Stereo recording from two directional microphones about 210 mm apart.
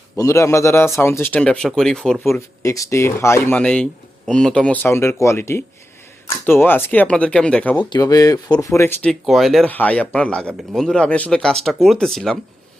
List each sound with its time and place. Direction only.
0.2 s speech: 15° left (ahead or behind)
7.9 s speech: 15° left (ahead or behind); by 12.4 s centre (ahead or behind)